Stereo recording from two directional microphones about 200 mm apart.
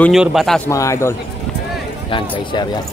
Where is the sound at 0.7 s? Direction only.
15° left (ahead or behind).